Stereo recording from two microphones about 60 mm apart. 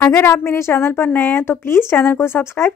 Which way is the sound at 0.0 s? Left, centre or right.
Left.